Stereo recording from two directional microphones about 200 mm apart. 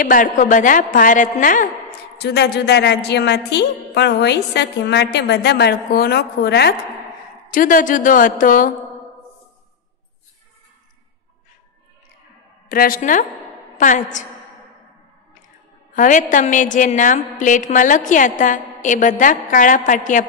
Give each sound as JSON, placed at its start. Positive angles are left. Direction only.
{"t": 0.0, "sound": "a woman's voice", "side_deg": 45}
{"t": 2.1, "sound": "a woman's voice", "side_deg": 55}
{"t": 7.5, "sound": "a woman's voice", "side_deg": 40}
{"t": 12.6, "sound": "a woman's voice", "side_deg": 45}
{"t": 15.9, "sound": "a woman's voice", "side_deg": 40}